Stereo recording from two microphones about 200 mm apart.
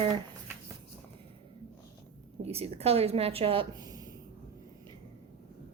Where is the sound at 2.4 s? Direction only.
30° right (ahead or behind).